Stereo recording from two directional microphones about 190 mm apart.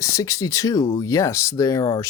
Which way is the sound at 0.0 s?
15° left (ahead or behind).